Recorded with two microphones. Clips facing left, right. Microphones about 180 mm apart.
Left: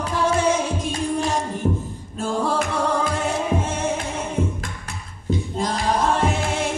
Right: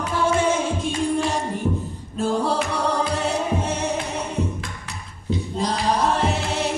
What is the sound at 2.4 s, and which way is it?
Music, 50° left (ahead or behind).